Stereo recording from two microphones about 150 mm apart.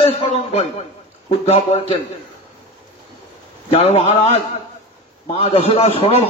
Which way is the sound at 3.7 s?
45° left (ahead or behind).